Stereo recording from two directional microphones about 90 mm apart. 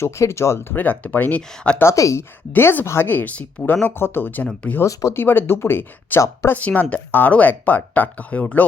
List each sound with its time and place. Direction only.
0.0 s speech: 30° left (ahead or behind); by 1.8 s 10° left (ahead or behind)
1.8 s speech: 35° left (ahead or behind)
6.6 s speech: 15° left (ahead or behind)